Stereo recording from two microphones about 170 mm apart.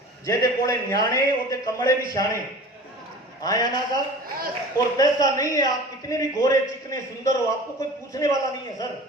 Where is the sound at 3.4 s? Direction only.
20° left (ahead or behind).